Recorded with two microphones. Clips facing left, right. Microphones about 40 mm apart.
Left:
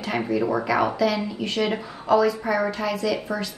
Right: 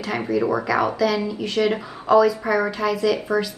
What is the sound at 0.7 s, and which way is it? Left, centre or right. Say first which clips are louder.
A woman's voice: right 1 dB; centre.